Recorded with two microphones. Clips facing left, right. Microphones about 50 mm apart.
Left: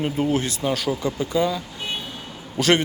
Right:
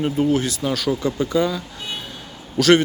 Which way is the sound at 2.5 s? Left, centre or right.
Left.